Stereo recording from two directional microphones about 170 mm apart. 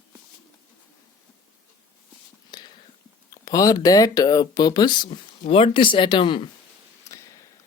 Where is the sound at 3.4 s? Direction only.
20° left (ahead or behind).